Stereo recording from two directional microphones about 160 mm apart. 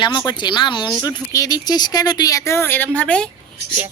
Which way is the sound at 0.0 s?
30° left (ahead or behind).